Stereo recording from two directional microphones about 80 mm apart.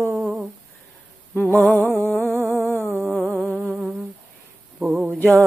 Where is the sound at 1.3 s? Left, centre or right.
Left.